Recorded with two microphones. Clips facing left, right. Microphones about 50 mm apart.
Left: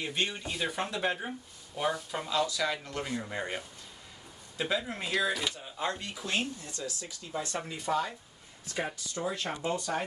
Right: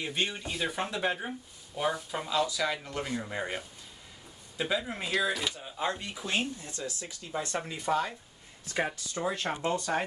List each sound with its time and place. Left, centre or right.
0.0 s speech: centre
6.6 s speech: right
8.8 s speech: right
9.7 s speech: right